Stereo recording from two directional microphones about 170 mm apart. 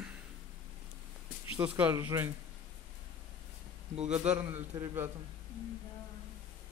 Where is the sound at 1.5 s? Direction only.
10° right (ahead or behind).